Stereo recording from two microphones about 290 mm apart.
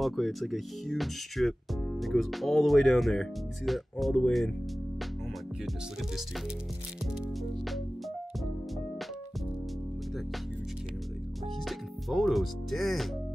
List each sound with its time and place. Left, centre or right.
0.0 s speech: centre
7.2 s music: centre
11.6 s speech: centre